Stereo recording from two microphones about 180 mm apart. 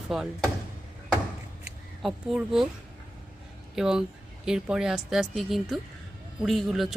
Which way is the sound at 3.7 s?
5° right (ahead or behind).